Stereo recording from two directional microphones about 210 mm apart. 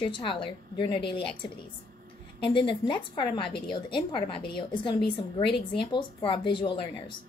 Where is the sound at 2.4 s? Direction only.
25° left (ahead or behind).